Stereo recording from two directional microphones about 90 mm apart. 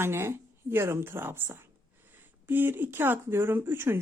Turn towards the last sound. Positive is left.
turn(degrees=-25)  # may be behind; listen again after turning